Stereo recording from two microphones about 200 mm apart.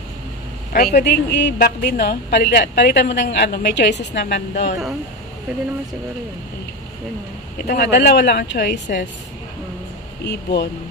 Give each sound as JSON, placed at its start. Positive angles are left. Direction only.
{"t": 0.7, "sound": "a woman's voice", "side_deg": 50}
{"t": 7.6, "sound": "speech", "side_deg": 50}
{"t": 10.2, "sound": "a woman's voice", "side_deg": 60}